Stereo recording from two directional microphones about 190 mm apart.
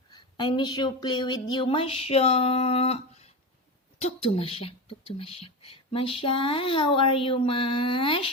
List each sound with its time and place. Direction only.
0.1 s speech: 25° left (ahead or behind)